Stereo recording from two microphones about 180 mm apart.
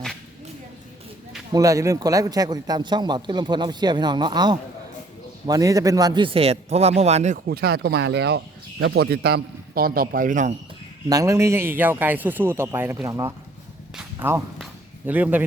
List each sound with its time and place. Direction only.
1.5 s a man's voice: 20° right (ahead or behind); by 7.3 s 35° right (ahead or behind)
7.4 s a man's voice: 60° right (ahead or behind)
11.1 s a man's voice: 15° right (ahead or behind)
13.9 s a sound: 10° right (ahead or behind)